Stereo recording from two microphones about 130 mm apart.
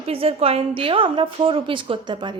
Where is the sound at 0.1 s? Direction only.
45° right (ahead or behind).